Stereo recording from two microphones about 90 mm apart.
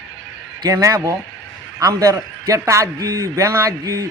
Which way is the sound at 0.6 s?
40° right (ahead or behind).